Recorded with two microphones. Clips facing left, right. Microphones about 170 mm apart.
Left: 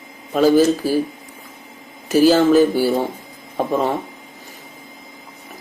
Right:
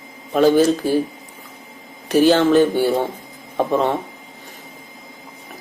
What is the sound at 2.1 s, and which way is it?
Speech, 5° left (ahead or behind).